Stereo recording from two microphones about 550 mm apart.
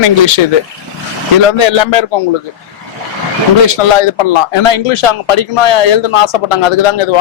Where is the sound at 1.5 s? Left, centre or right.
Left.